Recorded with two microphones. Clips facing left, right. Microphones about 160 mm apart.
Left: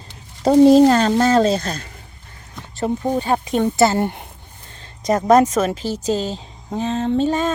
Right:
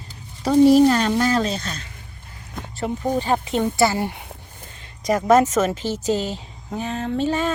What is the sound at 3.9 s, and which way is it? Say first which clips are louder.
Speech: left 5 dB; centre (ahead or behind).